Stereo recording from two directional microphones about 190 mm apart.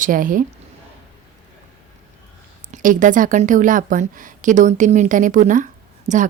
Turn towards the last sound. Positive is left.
turn(degrees=-40)  # may be behind; listen again after turning